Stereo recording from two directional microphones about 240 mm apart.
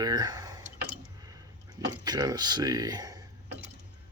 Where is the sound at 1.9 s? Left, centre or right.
Centre.